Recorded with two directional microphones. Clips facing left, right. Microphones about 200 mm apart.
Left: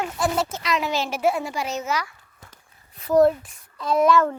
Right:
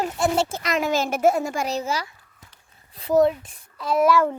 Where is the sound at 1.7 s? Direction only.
30° right (ahead or behind).